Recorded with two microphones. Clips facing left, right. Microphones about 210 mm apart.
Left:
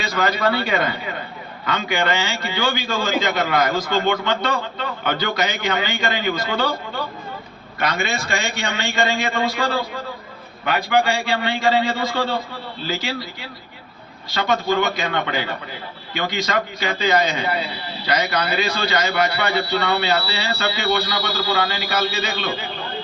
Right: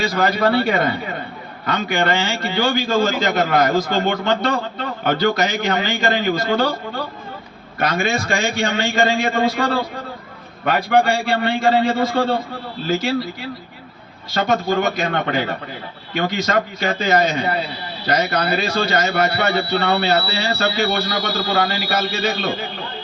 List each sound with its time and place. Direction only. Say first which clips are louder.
0.1 s a man's voice: left 1 dB; 40° right (ahead or behind)
7.8 s a man's voice: right 3 dB; 45° right (ahead or behind)
14.3 s a man's voice: right 1 dB; 45° right (ahead or behind)
16.8 s a man's voice: right 1 dB; 50° right (ahead or behind)